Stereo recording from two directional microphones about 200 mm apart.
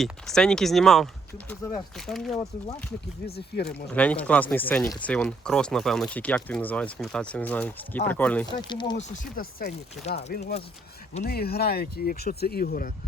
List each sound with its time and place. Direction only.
0.0 s speech: 5° left (ahead or behind)
1.5 s speech: 15° left (ahead or behind)
2.0 s speech: centre (ahead or behind)
3.2 s speech: 55° left (ahead or behind)
3.9 s speech: 5° left (ahead or behind)
8.5 s speech: 20° left (ahead or behind)
9.0 s speech: 40° left (ahead or behind)